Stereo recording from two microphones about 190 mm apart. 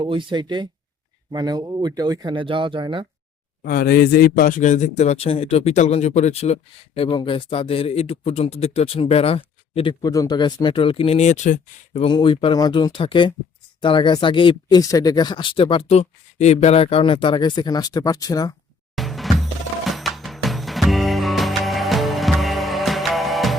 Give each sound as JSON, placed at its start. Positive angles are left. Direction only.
{"t": 0.0, "sound": "speech", "side_deg": -25}
{"t": 3.6, "sound": "a man's voice", "side_deg": 50}
{"t": 10.0, "sound": "speech", "side_deg": 20}
{"t": 18.9, "sound": "music", "side_deg": 0}